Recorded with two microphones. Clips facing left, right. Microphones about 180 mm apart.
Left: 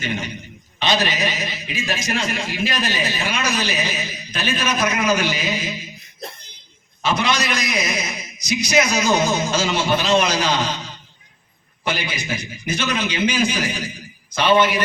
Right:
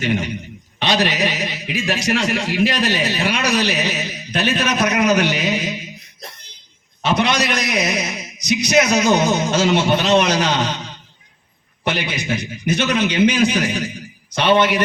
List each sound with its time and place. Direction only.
0.8 s a man's voice: 70° right (ahead or behind)
7.0 s a man's voice: 60° right (ahead or behind)
11.9 s a man's voice: 60° right (ahead or behind)